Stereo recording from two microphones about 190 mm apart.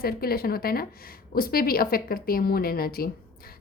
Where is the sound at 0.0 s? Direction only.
50° left (ahead or behind).